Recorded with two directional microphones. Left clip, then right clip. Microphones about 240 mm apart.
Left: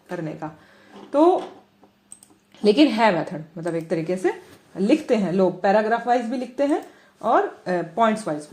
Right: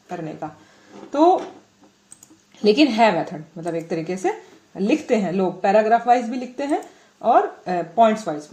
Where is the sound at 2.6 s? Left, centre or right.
Centre.